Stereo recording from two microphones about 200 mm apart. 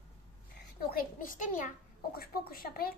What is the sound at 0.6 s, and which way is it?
A child's voice, 45° left (ahead or behind).